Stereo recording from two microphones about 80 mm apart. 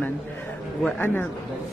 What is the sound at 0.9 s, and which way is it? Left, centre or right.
Speech, left.